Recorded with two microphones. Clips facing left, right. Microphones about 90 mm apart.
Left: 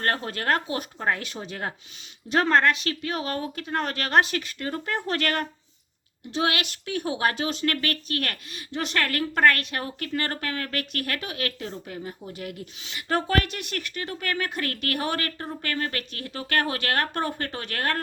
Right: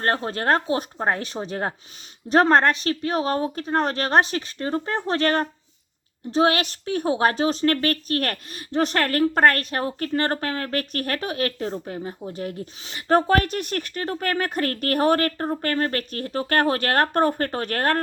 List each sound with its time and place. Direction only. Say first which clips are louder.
0.0 s a woman's voice: right 4 dB; 30° right (ahead or behind)